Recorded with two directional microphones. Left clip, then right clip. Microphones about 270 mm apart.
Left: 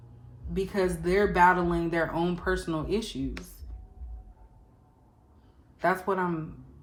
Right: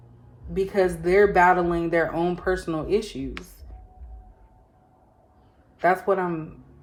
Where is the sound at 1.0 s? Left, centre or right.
Centre.